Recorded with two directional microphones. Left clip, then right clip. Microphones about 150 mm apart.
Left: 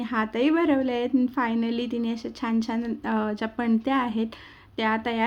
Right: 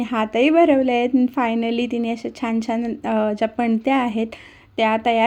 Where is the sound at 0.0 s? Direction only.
25° right (ahead or behind).